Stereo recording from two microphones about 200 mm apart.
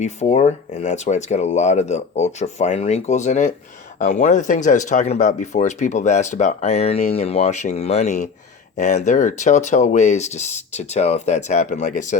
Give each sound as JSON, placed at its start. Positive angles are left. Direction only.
{"t": 0.0, "sound": "speech", "side_deg": 35}